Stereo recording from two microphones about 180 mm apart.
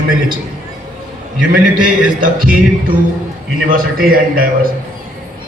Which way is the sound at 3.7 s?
50° right (ahead or behind).